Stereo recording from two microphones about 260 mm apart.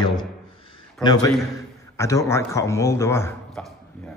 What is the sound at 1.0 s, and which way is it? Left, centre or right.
Speech, centre.